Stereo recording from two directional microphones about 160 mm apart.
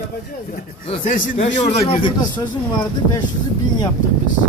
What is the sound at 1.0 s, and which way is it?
A man's voice, 55° left (ahead or behind).